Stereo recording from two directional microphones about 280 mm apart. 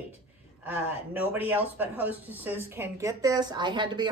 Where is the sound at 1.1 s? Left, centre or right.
Centre.